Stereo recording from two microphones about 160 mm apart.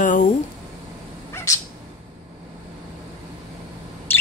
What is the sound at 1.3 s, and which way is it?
Owl, 20° left (ahead or behind).